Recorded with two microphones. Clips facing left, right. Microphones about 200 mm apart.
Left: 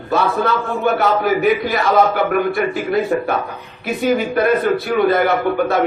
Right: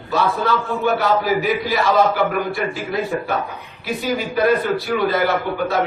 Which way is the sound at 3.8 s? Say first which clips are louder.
Left 5 dB; 55° left (ahead or behind).